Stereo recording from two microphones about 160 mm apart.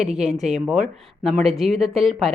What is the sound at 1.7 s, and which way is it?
Speech, 40° right (ahead or behind).